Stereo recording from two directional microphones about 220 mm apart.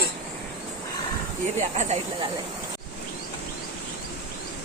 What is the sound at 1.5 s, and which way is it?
Speech, 30° right (ahead or behind).